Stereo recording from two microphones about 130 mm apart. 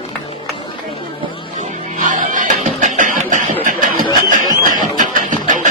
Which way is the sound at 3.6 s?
90° right.